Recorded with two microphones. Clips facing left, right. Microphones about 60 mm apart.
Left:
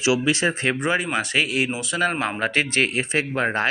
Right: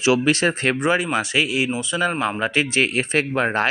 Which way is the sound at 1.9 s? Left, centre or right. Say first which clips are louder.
Even; centre.